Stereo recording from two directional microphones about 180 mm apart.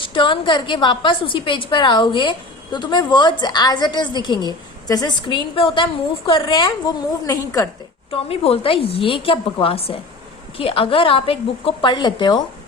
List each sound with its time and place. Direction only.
0.0 s a woman's voice: 25° left (ahead or behind)
8.1 s a woman's voice: 30° left (ahead or behind)